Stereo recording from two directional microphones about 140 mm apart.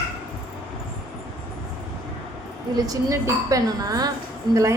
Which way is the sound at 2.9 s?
25° right (ahead or behind).